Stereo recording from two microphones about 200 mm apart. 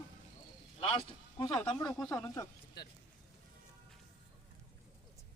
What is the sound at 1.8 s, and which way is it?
Speech, centre (ahead or behind).